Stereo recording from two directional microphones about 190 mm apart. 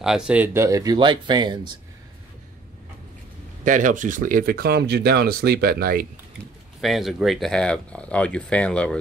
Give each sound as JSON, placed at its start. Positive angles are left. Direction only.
{"t": 0.0, "sound": "speech", "side_deg": -5}
{"t": 3.6, "sound": "speech", "side_deg": -40}
{"t": 6.8, "sound": "speech", "side_deg": 0}